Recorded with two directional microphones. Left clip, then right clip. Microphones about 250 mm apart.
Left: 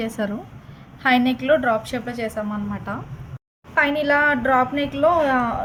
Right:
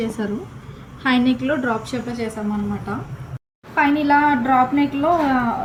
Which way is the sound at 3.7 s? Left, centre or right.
Left.